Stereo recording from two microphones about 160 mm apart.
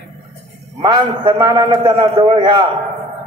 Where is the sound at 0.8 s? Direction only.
30° right (ahead or behind).